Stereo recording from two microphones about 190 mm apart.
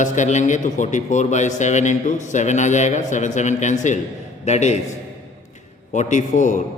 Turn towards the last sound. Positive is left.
turn(degrees=40)  # may be behind; listen again after turning